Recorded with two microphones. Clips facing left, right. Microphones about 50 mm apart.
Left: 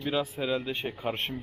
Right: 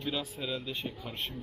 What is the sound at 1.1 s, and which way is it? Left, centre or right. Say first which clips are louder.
Speech: left 5 dB; left.